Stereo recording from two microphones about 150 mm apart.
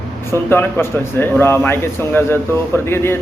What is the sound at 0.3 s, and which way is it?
A man's voice, 15° left (ahead or behind).